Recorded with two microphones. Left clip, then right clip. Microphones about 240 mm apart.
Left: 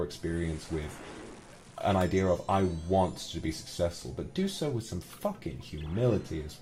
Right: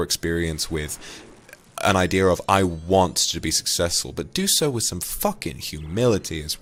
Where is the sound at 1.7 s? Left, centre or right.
Right.